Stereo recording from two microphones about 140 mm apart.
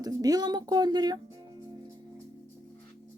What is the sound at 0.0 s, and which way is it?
Speech, 25° right (ahead or behind).